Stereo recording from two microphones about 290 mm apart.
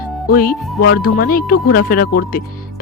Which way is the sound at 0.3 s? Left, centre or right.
Left.